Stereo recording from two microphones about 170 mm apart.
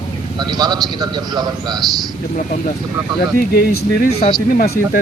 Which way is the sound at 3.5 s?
65° left (ahead or behind).